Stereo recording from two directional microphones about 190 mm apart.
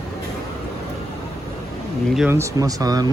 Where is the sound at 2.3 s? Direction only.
15° right (ahead or behind).